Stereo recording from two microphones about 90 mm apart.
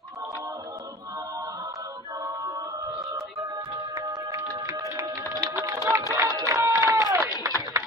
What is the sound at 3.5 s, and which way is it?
Music, 60° right (ahead or behind).